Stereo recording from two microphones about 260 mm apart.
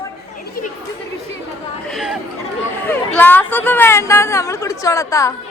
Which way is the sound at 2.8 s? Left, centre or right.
Centre.